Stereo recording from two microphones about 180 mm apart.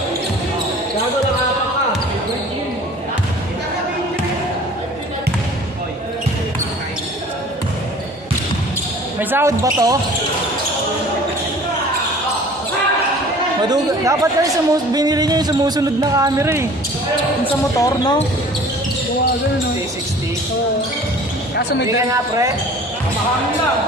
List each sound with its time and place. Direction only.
9.2 s speech: 10° right (ahead or behind)
13.6 s speech: 20° right (ahead or behind)
17.7 s speech: 20° left (ahead or behind)
21.8 s speech: 15° right (ahead or behind)